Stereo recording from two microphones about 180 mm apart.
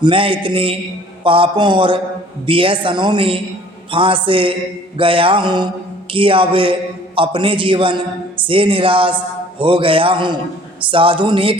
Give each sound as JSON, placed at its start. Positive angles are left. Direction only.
{"t": 0.0, "sound": "a woman's voice", "side_deg": -30}